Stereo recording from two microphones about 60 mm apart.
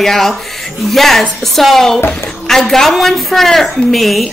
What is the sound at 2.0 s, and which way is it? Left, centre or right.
Speech, left.